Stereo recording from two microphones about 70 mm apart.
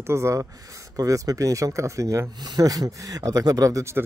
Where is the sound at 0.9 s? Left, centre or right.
Right.